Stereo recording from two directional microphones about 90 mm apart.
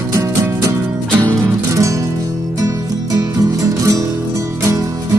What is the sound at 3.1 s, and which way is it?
Music, 40° right (ahead or behind).